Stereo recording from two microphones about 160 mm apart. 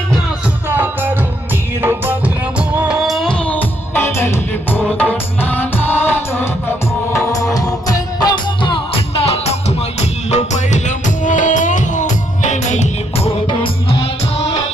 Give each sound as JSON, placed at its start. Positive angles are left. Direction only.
{"t": 0.7, "sound": "music", "side_deg": -15}